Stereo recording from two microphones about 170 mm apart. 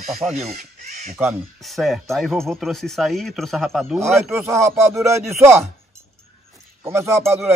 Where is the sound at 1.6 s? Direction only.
Centre (ahead or behind).